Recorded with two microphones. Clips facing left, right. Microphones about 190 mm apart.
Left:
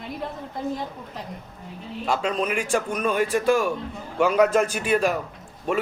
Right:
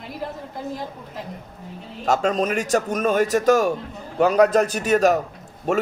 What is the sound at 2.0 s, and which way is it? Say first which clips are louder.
A man's voice: right 4 dB; 45° right (ahead or behind).